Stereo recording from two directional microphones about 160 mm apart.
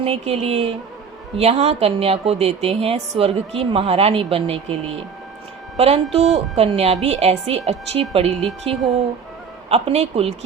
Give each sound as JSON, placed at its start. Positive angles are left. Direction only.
{"t": 0.0, "sound": "a woman's voice", "side_deg": -40}
{"t": 8.4, "sound": "speech", "side_deg": 0}
{"t": 9.6, "sound": "a woman's voice", "side_deg": -40}